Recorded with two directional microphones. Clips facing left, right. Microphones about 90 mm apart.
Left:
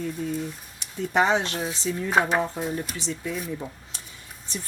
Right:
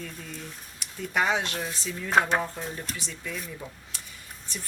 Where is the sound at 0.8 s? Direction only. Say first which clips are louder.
Left 5 dB; 30° left (ahead or behind).